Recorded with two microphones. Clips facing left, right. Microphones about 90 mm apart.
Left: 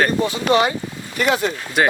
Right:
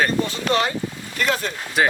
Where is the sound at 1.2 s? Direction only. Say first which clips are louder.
Left 4 dB; 10° left (ahead or behind).